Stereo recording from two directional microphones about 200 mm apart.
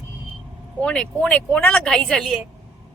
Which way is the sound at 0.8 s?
5° left (ahead or behind).